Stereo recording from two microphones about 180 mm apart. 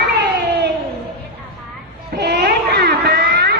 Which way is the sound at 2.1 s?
60° right (ahead or behind).